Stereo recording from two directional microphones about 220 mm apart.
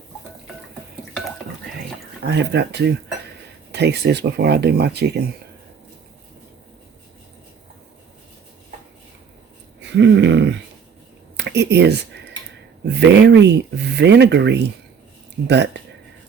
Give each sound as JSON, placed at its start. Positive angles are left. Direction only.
{"t": 2.2, "sound": "speech", "side_deg": -50}
{"t": 9.9, "sound": "speech", "side_deg": -55}
{"t": 13.0, "sound": "speech", "side_deg": -50}